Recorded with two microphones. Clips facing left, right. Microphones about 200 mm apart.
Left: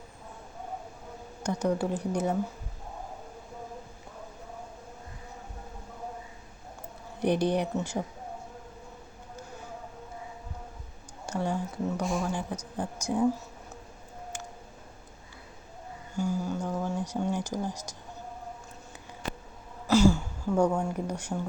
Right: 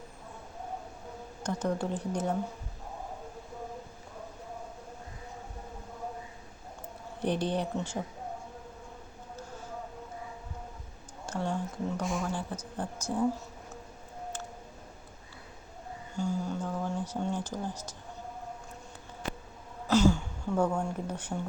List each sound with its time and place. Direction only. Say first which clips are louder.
1.5 s speech: left 3 dB; 10° left (ahead or behind)
7.2 s speech: left 4 dB; 10° left (ahead or behind)
11.3 s speech: left 2 dB; 10° left (ahead or behind)
16.1 s speech: left 2 dB; 10° left (ahead or behind)
19.9 s a sound: left 2 dB; 10° left (ahead or behind)